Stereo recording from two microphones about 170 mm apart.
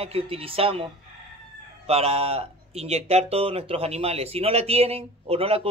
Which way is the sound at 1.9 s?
35° right (ahead or behind).